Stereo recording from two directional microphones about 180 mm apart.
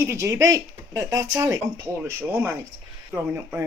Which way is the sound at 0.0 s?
15° right (ahead or behind).